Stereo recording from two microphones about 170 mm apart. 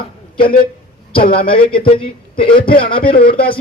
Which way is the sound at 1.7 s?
30° left (ahead or behind).